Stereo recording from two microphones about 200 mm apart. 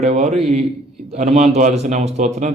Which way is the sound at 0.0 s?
35° right (ahead or behind).